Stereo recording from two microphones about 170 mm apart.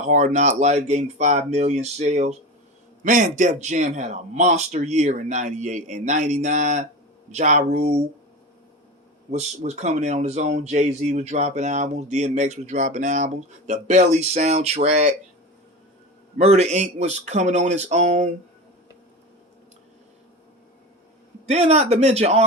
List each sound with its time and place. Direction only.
0.0 s speech: 45° right (ahead or behind)
9.3 s speech: 40° right (ahead or behind)
16.4 s speech: 40° right (ahead or behind)
21.4 s a man's voice: 40° right (ahead or behind)